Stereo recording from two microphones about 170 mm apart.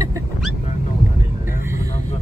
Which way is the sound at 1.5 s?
15° right (ahead or behind).